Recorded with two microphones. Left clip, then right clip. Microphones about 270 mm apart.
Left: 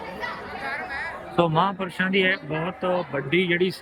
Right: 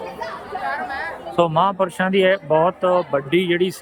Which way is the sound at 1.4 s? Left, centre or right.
Centre.